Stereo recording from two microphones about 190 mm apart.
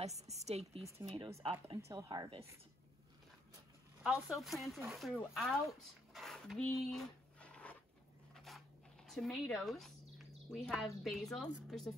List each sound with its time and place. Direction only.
0.0 s a woman's voice: 35° right (ahead or behind)
1.9 s speech: 20° right (ahead or behind)
4.0 s speech: centre (ahead or behind)